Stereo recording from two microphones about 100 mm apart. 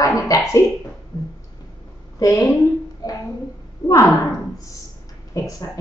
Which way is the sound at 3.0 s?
40° left (ahead or behind).